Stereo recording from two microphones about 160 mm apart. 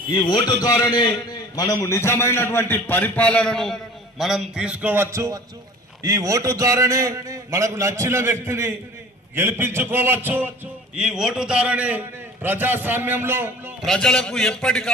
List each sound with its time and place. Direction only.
0.1 s a man's voice: 30° left (ahead or behind)
1.5 s a man's voice: 20° left (ahead or behind); by 13.7 s 15° right (ahead or behind)
13.8 s a man's voice: 5° left (ahead or behind)